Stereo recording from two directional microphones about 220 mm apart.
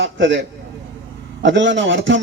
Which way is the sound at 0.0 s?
55° right (ahead or behind).